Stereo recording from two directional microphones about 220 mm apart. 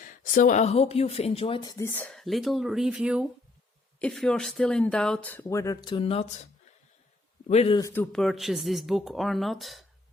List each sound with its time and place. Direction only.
0.0 s speech: 35° left (ahead or behind); by 1.9 s 20° left (ahead or behind)
1.9 s a man's voice: 5° left (ahead or behind); by 7.8 s 30° left (ahead or behind)
7.8 s speech: 15° left (ahead or behind)
8.1 s speech: centre (ahead or behind)